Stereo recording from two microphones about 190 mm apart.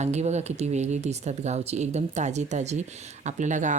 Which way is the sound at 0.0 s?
35° right (ahead or behind).